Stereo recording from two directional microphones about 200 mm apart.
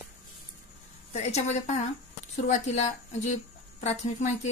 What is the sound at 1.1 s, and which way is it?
Speech, 30° left (ahead or behind).